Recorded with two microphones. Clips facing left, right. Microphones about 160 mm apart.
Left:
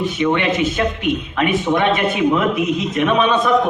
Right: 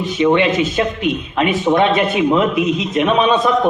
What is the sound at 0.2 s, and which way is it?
A man's voice, 25° right (ahead or behind).